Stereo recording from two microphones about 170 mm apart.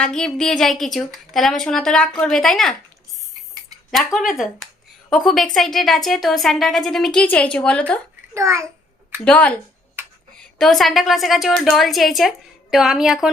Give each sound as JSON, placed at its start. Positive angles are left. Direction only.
{"t": 0.0, "sound": "a woman's voice", "side_deg": 5}
{"t": 4.3, "sound": "a woman's voice", "side_deg": 0}
{"t": 8.3, "sound": "a child's voice", "side_deg": -15}
{"t": 9.2, "sound": "a woman's voice", "side_deg": 5}